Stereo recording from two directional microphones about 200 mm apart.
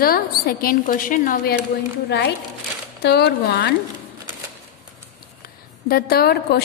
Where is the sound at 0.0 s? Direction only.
50° left (ahead or behind).